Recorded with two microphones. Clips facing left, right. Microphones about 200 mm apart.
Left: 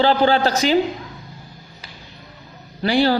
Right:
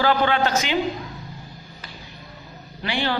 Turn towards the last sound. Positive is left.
turn(degrees=35)  # may be behind; listen again after turning